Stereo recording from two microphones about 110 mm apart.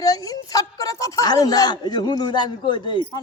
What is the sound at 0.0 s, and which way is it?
A man's voice, 30° left (ahead or behind).